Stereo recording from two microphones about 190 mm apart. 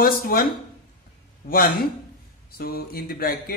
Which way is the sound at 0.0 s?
50° left (ahead or behind).